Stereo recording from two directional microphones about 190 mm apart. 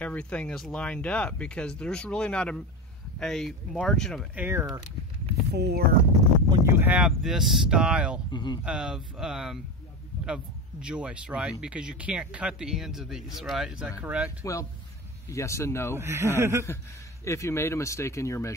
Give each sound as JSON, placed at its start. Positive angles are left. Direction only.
{"t": 0.0, "sound": "speech", "side_deg": 5}
{"t": 5.5, "sound": "speech", "side_deg": -60}
{"t": 6.6, "sound": "speech", "side_deg": -10}
{"t": 8.3, "sound": "speech", "side_deg": 25}
{"t": 8.6, "sound": "speech", "side_deg": -5}
{"t": 14.4, "sound": "speech", "side_deg": 15}
{"t": 16.0, "sound": "a man's voice", "side_deg": -15}
{"t": 16.6, "sound": "speech", "side_deg": 15}